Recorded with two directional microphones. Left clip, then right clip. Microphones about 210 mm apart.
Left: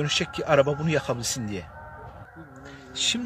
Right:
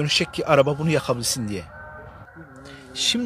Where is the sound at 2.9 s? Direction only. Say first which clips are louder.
Right 3 dB; 30° right (ahead or behind).